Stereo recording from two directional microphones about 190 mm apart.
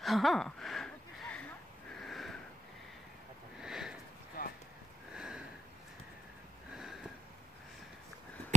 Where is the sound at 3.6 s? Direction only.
5° right (ahead or behind).